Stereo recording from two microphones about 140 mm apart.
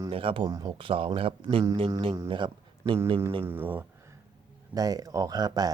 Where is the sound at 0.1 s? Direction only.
40° right (ahead or behind).